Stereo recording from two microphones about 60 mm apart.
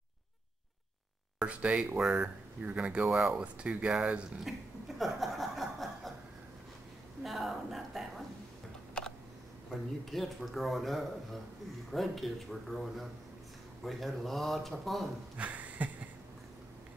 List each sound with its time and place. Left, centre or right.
1.4 s speech: centre
2.0 s speech: centre
2.2 s speech: right
4.5 s chuckle: centre
7.2 s a sound: centre
9.7 s a man's voice: centre
15.3 s a sound: right